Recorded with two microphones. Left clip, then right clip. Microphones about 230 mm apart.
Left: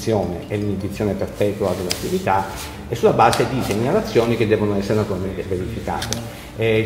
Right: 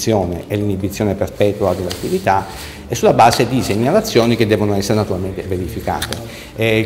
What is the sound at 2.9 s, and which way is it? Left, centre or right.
A man's voice, right.